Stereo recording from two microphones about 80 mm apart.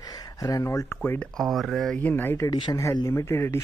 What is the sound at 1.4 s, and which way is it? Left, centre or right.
Speech, centre.